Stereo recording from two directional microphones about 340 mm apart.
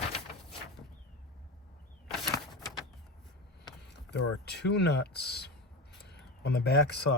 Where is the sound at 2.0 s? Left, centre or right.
Centre.